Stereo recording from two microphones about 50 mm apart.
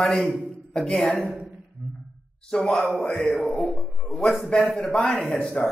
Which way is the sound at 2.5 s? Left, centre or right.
Centre.